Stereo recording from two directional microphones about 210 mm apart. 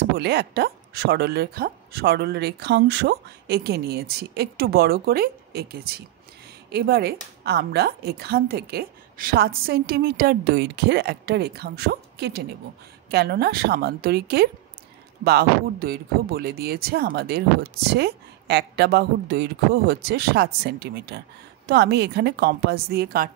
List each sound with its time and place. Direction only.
0.2 s speech: 50° right (ahead or behind)